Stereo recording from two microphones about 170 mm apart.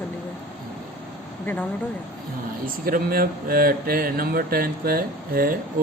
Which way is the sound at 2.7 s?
60° right (ahead or behind).